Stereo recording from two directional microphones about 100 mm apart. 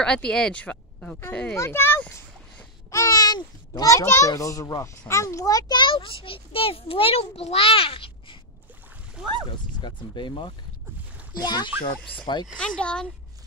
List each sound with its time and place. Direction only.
0.0 s speech: 10° left (ahead or behind)
1.5 s speech: 25° left (ahead or behind)
2.9 s a sound: 35° left (ahead or behind)
4.3 s a child's voice: 35° left (ahead or behind); by 8.4 s 65° left (ahead or behind)
9.8 s speech: 50° left (ahead or behind)
12.5 s speech: 10° left (ahead or behind)